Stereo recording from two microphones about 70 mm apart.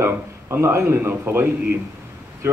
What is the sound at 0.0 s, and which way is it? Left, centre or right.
Speech, right.